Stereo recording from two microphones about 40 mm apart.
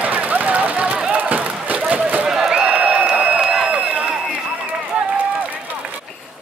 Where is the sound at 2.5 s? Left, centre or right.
Right.